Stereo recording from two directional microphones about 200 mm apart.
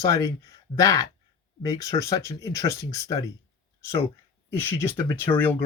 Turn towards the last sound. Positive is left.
turn(degrees=10)  # may be behind; listen again after turning